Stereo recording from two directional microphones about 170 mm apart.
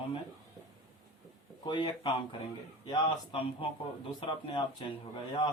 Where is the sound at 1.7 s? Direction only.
30° left (ahead or behind).